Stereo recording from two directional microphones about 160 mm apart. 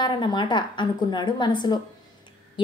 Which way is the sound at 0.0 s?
30° left (ahead or behind).